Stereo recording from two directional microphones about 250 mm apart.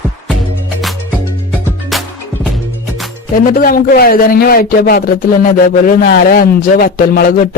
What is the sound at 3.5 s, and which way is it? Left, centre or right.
Speech, left.